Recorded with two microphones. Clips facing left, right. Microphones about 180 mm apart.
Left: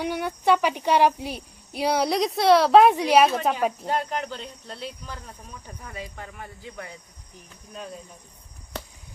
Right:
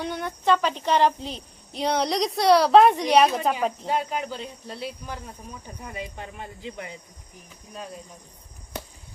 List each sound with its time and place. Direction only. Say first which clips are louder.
0.0 s a child's voice: left 2 dB; 10° left (ahead or behind)
3.8 s speech: even; 10° right (ahead or behind)